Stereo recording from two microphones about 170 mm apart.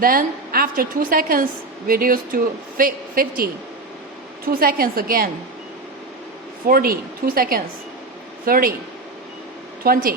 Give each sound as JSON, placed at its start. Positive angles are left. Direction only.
{"t": 0.0, "sound": "a woman's voice", "side_deg": -55}
{"t": 6.7, "sound": "a woman's voice", "side_deg": -60}
{"t": 9.8, "sound": "a woman's voice", "side_deg": -60}